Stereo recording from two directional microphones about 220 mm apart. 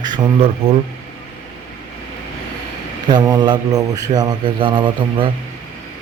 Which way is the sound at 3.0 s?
20° right (ahead or behind).